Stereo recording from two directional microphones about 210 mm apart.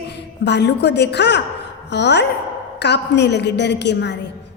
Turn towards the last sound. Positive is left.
turn(degrees=55)  # may be behind; listen again after turning